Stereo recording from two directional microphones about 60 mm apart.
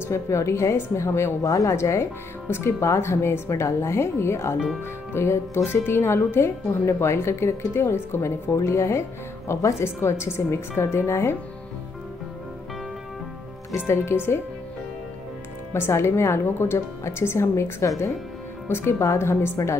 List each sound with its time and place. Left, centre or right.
0.1 s a woman's voice: left
13.7 s a woman's voice: left
15.7 s a woman's voice: left
17.8 s speech: left
18.7 s a woman's voice: left